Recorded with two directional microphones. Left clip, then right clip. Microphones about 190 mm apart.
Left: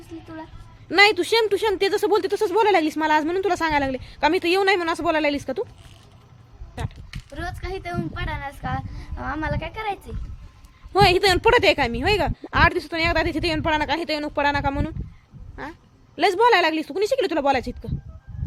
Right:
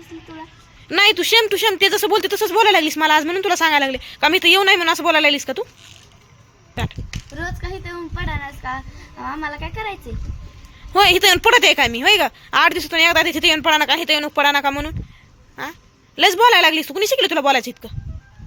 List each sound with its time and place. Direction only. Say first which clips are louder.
0.9 s speech: right 2 dB; centre (ahead or behind)
7.7 s speech: left 1 dB; 20° left (ahead or behind)
10.9 s speech: right 4 dB; centre (ahead or behind)